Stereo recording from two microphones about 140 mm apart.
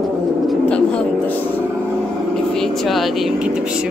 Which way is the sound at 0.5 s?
10° left (ahead or behind).